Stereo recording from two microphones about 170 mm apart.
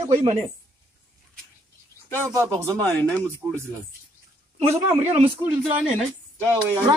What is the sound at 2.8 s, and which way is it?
Speech, 10° left (ahead or behind).